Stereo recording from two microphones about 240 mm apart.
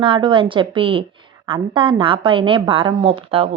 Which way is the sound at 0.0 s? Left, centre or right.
Centre.